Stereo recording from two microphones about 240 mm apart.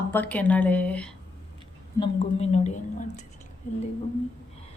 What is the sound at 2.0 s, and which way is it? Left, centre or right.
A woman's voice, left.